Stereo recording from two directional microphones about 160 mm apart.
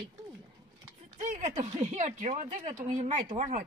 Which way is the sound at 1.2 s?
50° right (ahead or behind).